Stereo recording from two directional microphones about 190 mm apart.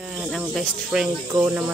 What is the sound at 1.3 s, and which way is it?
Speech, 10° right (ahead or behind).